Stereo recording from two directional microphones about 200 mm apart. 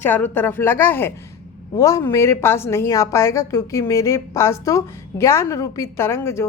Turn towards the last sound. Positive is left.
turn(degrees=10)  # may be behind; listen again after turning